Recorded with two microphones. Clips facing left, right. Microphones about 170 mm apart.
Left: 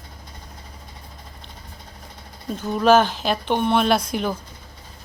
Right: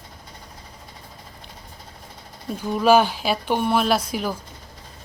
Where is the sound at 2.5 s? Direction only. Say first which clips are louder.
Left 1 dB; 10° right (ahead or behind).